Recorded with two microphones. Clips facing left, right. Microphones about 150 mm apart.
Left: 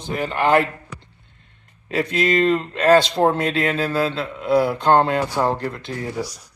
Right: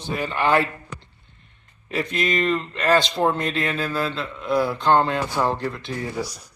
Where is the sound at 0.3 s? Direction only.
15° left (ahead or behind).